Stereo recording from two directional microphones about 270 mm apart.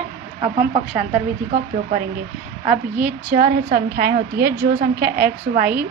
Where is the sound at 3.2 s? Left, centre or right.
Right.